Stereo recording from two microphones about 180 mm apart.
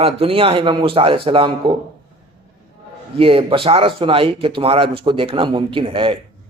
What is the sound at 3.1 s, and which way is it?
Speech, 30° right (ahead or behind).